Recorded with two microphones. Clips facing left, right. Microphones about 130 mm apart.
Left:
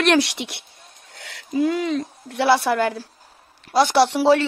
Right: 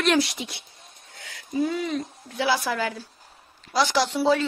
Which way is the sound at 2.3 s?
65° left (ahead or behind).